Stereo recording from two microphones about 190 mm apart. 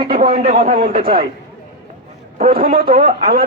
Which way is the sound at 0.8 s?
25° right (ahead or behind).